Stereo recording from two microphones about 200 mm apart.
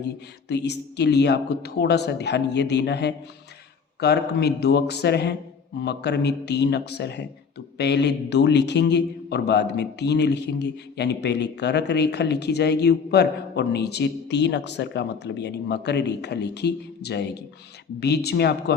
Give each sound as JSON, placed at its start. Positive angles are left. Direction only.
{"t": 0.0, "sound": "speech", "side_deg": 55}